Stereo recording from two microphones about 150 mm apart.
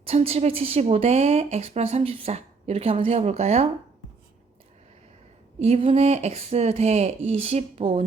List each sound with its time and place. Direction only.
0.0 s a woman's voice: 40° right (ahead or behind)
5.5 s a woman's voice: 45° right (ahead or behind)